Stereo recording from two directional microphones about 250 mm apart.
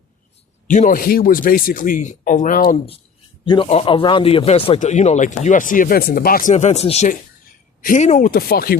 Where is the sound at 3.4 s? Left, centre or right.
Centre.